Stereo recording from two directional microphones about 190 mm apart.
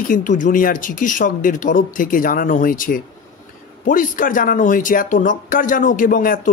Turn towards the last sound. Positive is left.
turn(degrees=45)  # may be behind; listen again after turning